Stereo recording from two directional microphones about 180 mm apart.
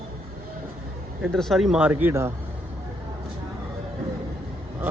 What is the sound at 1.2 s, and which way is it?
Speech, centre (ahead or behind).